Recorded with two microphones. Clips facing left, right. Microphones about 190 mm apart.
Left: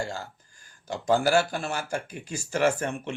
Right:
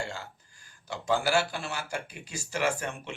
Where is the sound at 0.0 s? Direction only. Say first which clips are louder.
Left 4 dB; 40° left (ahead or behind).